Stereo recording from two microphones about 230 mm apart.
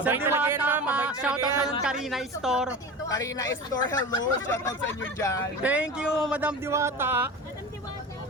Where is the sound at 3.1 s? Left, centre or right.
Centre.